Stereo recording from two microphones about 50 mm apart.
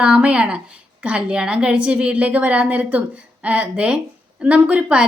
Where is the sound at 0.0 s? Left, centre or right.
Right.